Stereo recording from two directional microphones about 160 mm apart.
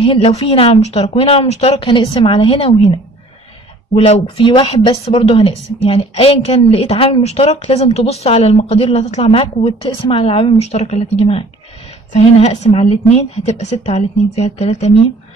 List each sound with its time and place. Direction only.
0.0 s a woman's voice: 35° left (ahead or behind)